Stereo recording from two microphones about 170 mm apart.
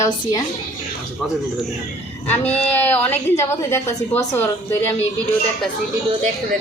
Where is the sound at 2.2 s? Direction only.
10° left (ahead or behind).